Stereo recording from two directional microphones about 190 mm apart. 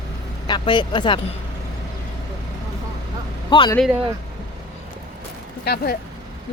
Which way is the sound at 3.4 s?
25° left (ahead or behind).